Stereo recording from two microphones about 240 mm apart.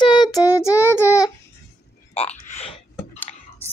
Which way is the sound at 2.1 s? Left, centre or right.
Left.